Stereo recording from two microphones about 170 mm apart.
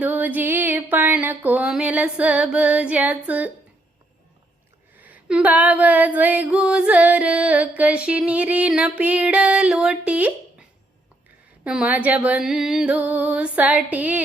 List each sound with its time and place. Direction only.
0.0 s female singing: 10° right (ahead or behind)
4.9 s female singing: 10° right (ahead or behind)